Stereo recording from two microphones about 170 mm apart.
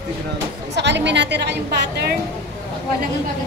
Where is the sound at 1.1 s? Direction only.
90° right.